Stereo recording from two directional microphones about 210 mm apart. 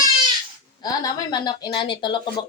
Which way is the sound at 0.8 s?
20° left (ahead or behind).